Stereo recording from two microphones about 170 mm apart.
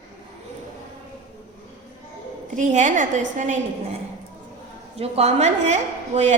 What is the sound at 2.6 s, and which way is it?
A woman's voice, 45° right (ahead or behind).